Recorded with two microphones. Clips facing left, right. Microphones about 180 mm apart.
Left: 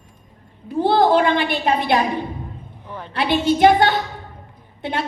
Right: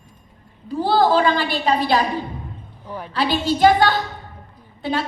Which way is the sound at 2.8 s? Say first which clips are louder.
Right 2 dB; 5° right (ahead or behind).